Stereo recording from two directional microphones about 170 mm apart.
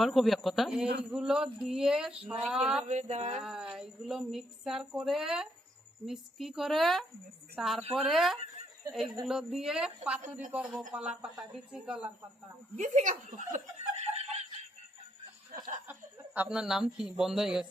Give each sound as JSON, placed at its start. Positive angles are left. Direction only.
{"t": 0.0, "sound": "a woman's voice", "side_deg": 0}
{"t": 2.8, "sound": "speech", "side_deg": -45}
{"t": 3.4, "sound": "a woman's voice", "side_deg": -5}
{"t": 8.9, "sound": "speech", "side_deg": -20}
{"t": 9.2, "sound": "a woman's voice", "side_deg": -5}
{"t": 12.7, "sound": "speech", "side_deg": -45}
{"t": 15.9, "sound": "a woman's voice", "side_deg": -10}